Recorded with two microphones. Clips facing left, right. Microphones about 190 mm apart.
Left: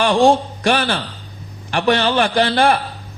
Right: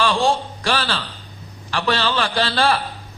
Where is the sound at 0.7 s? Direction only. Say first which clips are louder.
Left 5 dB; 20° left (ahead or behind).